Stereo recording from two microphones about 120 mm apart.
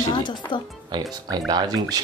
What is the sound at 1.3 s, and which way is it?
Speech, 35° right (ahead or behind).